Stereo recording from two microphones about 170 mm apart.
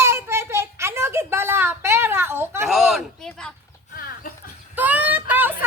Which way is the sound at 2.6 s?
Centre (ahead or behind).